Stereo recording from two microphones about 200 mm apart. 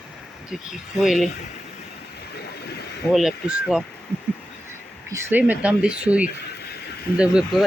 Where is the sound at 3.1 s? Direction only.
5° right (ahead or behind).